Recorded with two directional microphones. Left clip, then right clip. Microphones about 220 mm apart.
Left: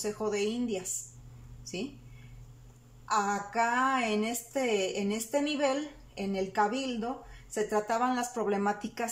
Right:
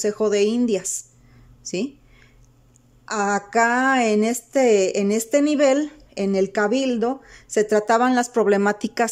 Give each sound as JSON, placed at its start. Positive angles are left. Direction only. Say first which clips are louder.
{"t": 0.0, "sound": "a woman's voice", "louder": "right 12 dB", "side_deg": -45}
{"t": 3.1, "sound": "a woman's voice", "louder": "right 7 dB", "side_deg": -45}